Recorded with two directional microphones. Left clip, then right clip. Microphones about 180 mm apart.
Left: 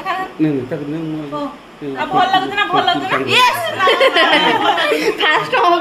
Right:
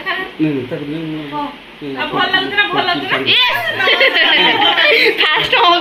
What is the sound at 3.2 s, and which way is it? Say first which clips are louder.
Speech: even; 10° left (ahead or behind).